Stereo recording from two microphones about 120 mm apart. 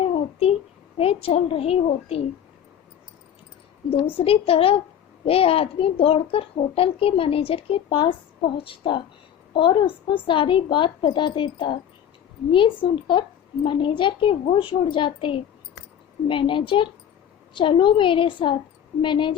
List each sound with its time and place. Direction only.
0.0 s a sound: 55° left (ahead or behind)
0.9 s a woman's voice: 55° left (ahead or behind)
4.2 s a child's voice: 55° left (ahead or behind)